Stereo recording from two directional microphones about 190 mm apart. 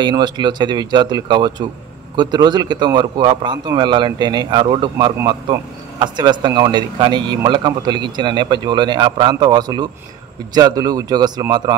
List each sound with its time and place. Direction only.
0.0 s speech: 25° right (ahead or behind)